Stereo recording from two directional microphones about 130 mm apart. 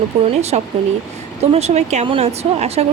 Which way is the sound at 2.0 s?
50° right (ahead or behind).